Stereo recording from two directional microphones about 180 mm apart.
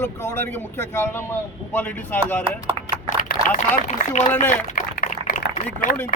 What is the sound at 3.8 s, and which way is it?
Speech, 40° left (ahead or behind).